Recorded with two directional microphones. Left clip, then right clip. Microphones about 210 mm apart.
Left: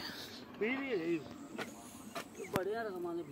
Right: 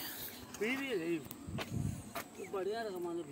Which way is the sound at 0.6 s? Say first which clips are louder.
Even; centre (ahead or behind).